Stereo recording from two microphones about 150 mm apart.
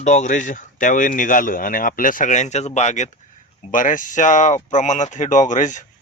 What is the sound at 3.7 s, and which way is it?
A man's voice, 60° left (ahead or behind).